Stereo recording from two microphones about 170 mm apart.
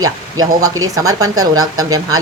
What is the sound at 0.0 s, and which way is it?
A woman's voice, 20° right (ahead or behind).